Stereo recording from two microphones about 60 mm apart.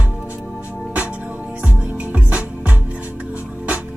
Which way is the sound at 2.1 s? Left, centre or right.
Right.